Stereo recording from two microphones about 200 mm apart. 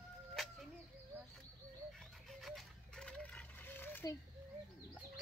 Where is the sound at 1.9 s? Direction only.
Centre (ahead or behind).